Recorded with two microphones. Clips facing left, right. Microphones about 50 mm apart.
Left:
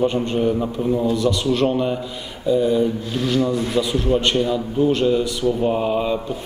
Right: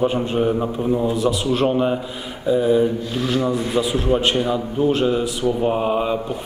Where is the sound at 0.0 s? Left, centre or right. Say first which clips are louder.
Even; centre.